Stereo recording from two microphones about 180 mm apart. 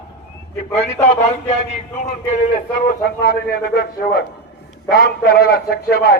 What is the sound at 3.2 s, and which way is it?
Speech, 60° left (ahead or behind).